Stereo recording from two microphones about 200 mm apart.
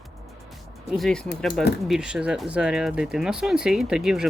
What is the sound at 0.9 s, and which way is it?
Speech, centre (ahead or behind).